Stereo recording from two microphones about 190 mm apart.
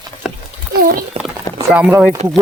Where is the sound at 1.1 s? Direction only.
30° right (ahead or behind).